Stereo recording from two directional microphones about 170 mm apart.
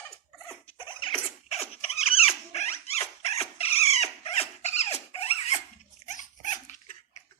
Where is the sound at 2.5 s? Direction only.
40° left (ahead or behind).